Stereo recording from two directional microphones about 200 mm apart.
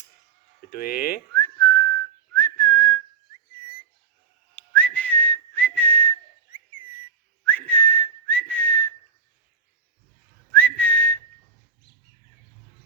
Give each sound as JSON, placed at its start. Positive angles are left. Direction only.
{"t": 0.7, "sound": "speech", "side_deg": 45}
{"t": 1.3, "sound": "whistling", "side_deg": 10}
{"t": 4.5, "sound": "whistling", "side_deg": 10}
{"t": 7.4, "sound": "whistling", "side_deg": 10}
{"t": 10.5, "sound": "whistling", "side_deg": 5}